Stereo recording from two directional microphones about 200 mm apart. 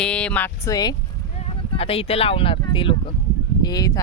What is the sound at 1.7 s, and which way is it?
Speech, 30° left (ahead or behind).